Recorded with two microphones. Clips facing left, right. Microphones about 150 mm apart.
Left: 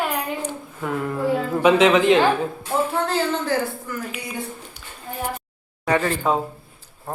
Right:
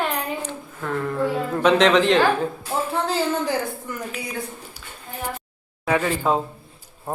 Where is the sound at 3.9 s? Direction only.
20° right (ahead or behind).